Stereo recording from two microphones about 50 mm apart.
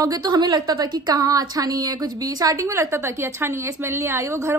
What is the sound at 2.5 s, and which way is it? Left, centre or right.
A woman's voice, right.